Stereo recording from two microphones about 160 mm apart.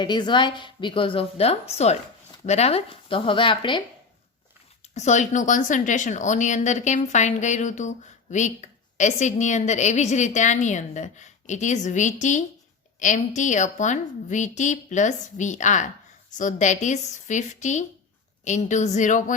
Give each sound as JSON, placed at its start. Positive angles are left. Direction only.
{"t": 0.0, "sound": "a woman's voice", "side_deg": 30}
{"t": 4.9, "sound": "speech", "side_deg": 50}